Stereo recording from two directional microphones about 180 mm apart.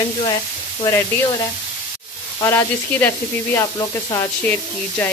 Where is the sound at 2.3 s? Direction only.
15° left (ahead or behind).